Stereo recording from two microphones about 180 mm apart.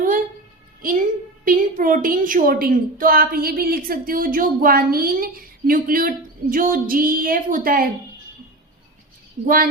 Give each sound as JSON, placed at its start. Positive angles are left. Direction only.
{"t": 0.8, "sound": "a woman's voice", "side_deg": -50}